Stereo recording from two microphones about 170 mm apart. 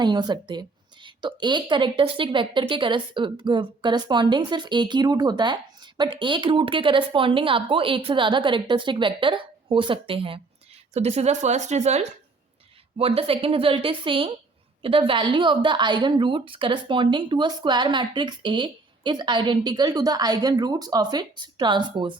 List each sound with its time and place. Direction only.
0.0 s a woman's voice: 25° right (ahead or behind)